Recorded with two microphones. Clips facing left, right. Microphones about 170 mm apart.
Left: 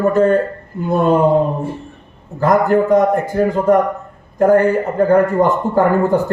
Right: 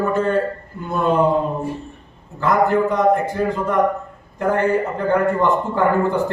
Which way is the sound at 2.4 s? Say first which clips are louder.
Left 4 dB; 40° left (ahead or behind).